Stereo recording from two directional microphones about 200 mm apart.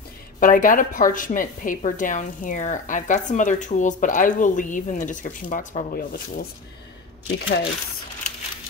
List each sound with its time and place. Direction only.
0.4 s a woman's voice: 40° left (ahead or behind)
7.2 s speech: 60° left (ahead or behind)